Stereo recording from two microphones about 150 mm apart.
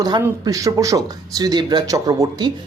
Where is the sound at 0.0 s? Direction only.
25° right (ahead or behind).